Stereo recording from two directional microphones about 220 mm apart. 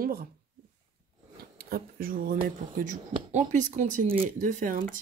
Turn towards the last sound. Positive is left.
turn(degrees=-35)  # may be behind; listen again after turning